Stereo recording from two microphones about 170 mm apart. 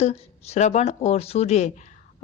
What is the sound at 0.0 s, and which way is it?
Speech, 40° left (ahead or behind).